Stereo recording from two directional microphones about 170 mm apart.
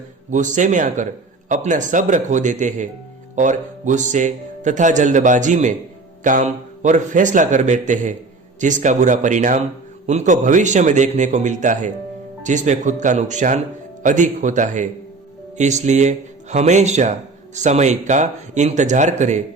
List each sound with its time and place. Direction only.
0.3 s a man's voice: 45° right (ahead or behind)